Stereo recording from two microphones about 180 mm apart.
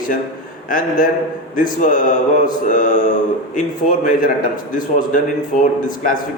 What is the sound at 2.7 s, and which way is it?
Speech, 45° left (ahead or behind).